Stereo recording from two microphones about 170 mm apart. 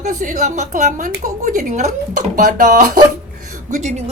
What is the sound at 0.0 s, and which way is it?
A woman's voice, 50° right (ahead or behind).